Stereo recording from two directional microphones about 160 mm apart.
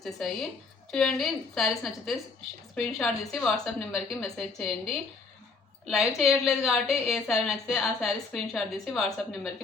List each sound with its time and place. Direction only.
0.0 s a woman's voice: centre (ahead or behind)